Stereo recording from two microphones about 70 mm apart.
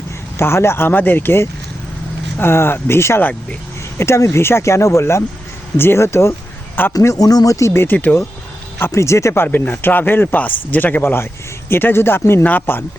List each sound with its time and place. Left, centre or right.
0.3 s speech: left
7.0 s speech: left
7.9 s speech: left
9.0 s speech: left
12.4 s speech: left